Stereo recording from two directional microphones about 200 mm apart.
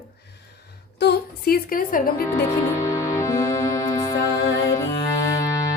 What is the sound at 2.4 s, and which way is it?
Music, 15° left (ahead or behind).